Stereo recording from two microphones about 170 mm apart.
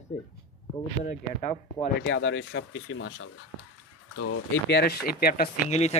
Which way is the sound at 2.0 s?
90° left.